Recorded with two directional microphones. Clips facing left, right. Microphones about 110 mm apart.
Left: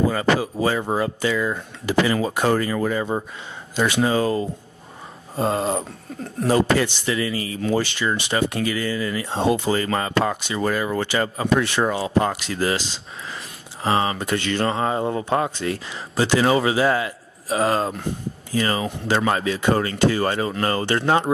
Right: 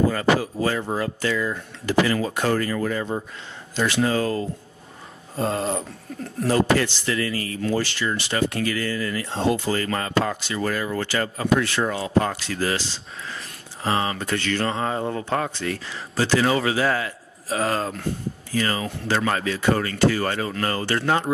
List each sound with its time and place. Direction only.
0.1 s speech: 15° left (ahead or behind)